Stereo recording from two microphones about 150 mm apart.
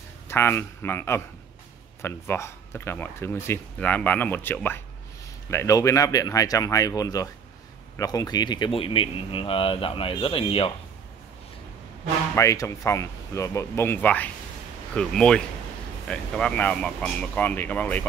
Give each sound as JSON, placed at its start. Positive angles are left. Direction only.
{"t": 0.3, "sound": "speech", "side_deg": 15}
{"t": 12.4, "sound": "speech", "side_deg": 20}